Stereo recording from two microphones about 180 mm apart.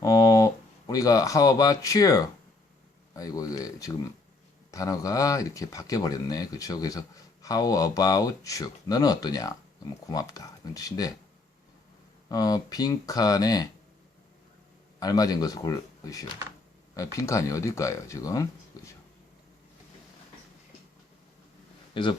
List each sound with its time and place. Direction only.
0.0 s speech: 20° left (ahead or behind)
12.3 s speech: 20° left (ahead or behind)
14.9 s speech: 20° left (ahead or behind)